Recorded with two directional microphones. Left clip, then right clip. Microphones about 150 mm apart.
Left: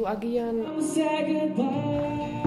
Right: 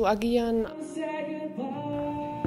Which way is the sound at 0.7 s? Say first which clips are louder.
Left 7 dB; 40° left (ahead or behind).